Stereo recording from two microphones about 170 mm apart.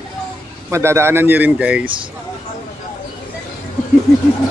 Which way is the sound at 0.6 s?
15° right (ahead or behind).